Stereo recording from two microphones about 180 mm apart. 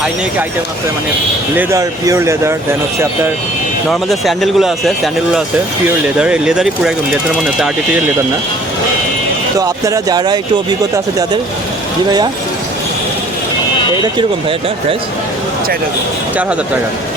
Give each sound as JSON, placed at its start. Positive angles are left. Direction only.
{"t": 1.5, "sound": "speech", "side_deg": -15}
{"t": 3.8, "sound": "speech", "side_deg": 0}
{"t": 9.6, "sound": "speech", "side_deg": -20}